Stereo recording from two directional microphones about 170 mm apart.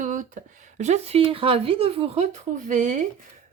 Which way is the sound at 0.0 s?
50° right (ahead or behind).